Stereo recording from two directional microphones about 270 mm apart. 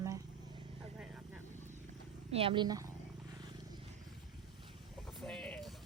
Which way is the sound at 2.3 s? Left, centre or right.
Centre.